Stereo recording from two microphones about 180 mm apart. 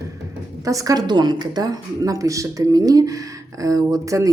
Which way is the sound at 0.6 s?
20° right (ahead or behind).